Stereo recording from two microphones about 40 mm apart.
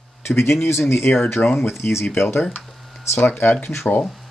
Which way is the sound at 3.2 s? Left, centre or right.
Left.